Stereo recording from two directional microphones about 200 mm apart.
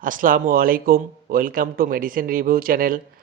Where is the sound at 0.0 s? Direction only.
45° right (ahead or behind).